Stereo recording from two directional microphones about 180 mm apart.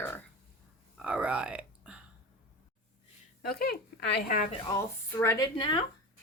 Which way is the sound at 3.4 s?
60° left (ahead or behind).